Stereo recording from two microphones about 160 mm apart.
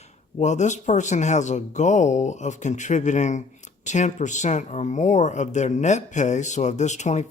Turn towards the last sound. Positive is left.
turn(degrees=45)  # may be behind; listen again after turning